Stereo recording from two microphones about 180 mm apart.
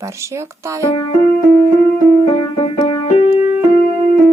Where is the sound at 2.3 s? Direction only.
30° left (ahead or behind).